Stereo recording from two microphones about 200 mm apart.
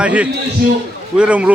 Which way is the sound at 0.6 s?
50° right (ahead or behind).